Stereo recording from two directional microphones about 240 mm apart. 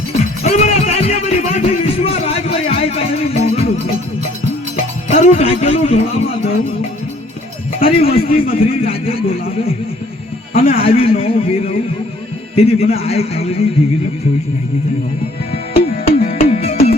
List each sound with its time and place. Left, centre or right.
0.4 s a sound: left
5.1 s a man's voice: left
7.8 s a man's voice: left
10.5 s a man's voice: left
16.0 s music: left